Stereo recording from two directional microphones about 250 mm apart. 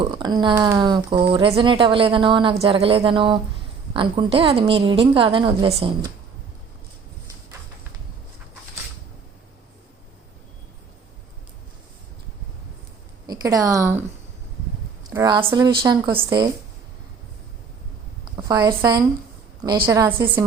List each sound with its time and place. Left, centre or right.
0.0 s speech: centre
13.2 s a woman's voice: centre
15.1 s speech: centre
18.4 s speech: centre